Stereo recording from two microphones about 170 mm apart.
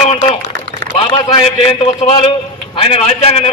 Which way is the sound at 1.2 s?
30° left (ahead or behind).